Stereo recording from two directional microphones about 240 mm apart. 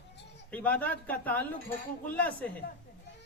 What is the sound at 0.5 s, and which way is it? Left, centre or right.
Speech, centre.